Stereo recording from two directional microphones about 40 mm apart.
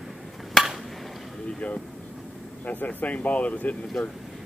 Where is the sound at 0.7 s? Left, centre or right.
Centre.